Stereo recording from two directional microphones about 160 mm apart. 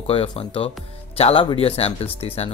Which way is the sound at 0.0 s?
35° left (ahead or behind).